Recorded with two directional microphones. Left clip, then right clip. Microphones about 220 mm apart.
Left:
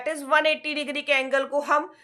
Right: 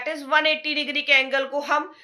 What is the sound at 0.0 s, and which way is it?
A woman's voice, 55° left (ahead or behind).